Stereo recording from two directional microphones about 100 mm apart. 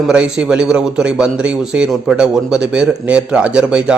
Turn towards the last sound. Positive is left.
turn(degrees=-10)  # may be behind; listen again after turning